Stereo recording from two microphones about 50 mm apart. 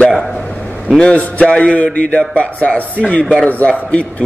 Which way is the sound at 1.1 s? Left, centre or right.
Left.